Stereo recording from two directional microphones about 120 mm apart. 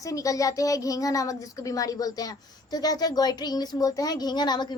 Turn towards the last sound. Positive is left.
turn(degrees=35)  # may be behind; listen again after turning